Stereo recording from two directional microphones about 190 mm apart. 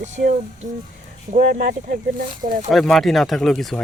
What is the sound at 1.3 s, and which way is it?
Speech, 50° right (ahead or behind).